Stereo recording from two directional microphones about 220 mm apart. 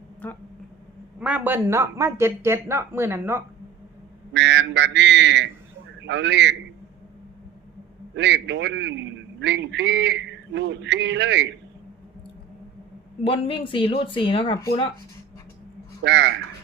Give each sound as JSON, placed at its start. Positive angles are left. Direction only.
{"t": 1.2, "sound": "speech", "side_deg": -10}
{"t": 4.4, "sound": "a man's voice", "side_deg": -50}
{"t": 8.1, "sound": "a man's voice", "side_deg": -55}
{"t": 13.2, "sound": "speech", "side_deg": 25}
{"t": 16.0, "sound": "a man's voice", "side_deg": -55}